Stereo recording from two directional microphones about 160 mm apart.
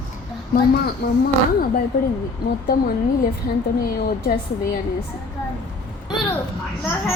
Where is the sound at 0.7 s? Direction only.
75° left (ahead or behind).